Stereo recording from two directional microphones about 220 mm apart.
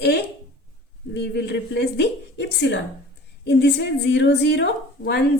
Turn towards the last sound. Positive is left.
turn(degrees=50)  # may be behind; listen again after turning